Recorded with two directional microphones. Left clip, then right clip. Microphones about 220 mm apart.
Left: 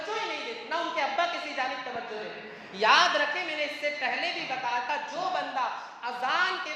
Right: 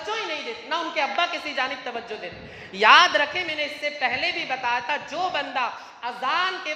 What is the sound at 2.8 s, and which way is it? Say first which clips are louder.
A woman's voice: right 7 dB; 45° right (ahead or behind).